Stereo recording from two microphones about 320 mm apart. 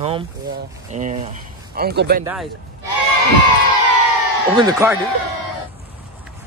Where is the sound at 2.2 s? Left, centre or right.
Centre.